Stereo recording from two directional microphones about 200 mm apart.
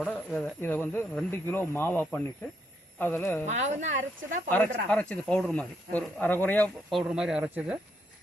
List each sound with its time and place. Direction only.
0.0 s speech: 5° left (ahead or behind)
3.4 s speech: 35° right (ahead or behind)
4.4 s speech: 10° left (ahead or behind)
7.0 s speech: 5° right (ahead or behind)